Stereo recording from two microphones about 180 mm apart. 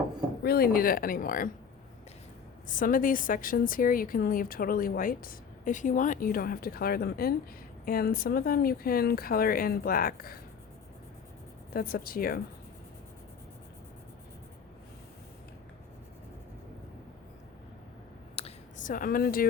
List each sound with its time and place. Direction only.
0.4 s a woman's voice: 60° left (ahead or behind)
2.6 s a woman's voice: 50° left (ahead or behind)
11.7 s speech: 55° left (ahead or behind)
18.3 s a sound: 35° left (ahead or behind)
18.9 s a woman's voice: 50° left (ahead or behind)